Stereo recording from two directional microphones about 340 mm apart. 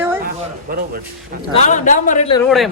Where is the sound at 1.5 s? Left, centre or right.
Left.